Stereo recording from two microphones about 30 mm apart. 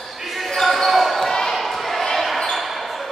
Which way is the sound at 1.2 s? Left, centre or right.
Centre.